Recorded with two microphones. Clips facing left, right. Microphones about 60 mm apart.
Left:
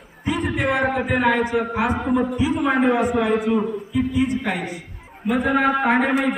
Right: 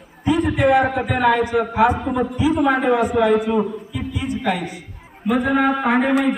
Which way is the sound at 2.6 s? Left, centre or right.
Centre.